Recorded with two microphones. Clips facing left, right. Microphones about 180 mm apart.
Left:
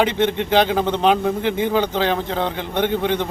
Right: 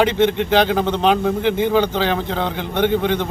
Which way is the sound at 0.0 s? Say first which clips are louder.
Right 2 dB; centre (ahead or behind).